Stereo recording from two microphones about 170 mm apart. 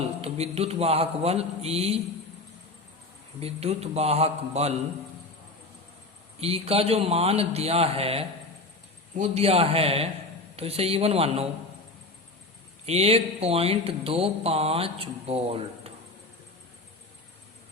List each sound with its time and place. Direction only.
0.2 s a man's voice: 35° right (ahead or behind)
3.4 s a man's voice: 40° right (ahead or behind)
6.4 s a man's voice: 35° right (ahead or behind)
12.8 s a man's voice: 35° right (ahead or behind)